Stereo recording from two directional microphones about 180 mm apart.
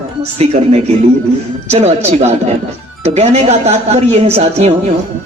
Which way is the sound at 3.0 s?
35° right (ahead or behind).